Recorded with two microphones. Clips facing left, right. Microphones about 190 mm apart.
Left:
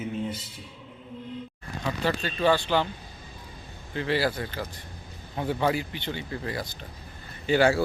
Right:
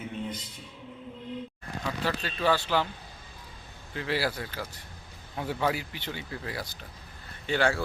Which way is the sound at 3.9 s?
5° right (ahead or behind).